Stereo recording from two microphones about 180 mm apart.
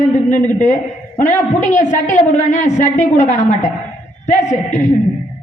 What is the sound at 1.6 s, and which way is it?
A woman's voice, 40° left (ahead or behind).